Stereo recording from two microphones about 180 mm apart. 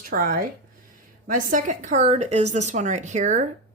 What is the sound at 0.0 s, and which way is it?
A woman's voice, 55° right (ahead or behind).